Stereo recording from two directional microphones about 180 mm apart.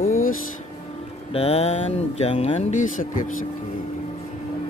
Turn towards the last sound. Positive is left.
turn(degrees=45)  # may be behind; listen again after turning